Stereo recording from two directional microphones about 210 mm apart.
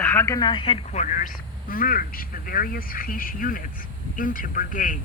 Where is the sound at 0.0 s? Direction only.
10° left (ahead or behind).